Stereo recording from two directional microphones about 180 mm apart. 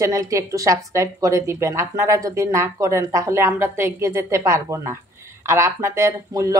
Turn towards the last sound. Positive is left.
turn(degrees=-15)  # may be behind; listen again after turning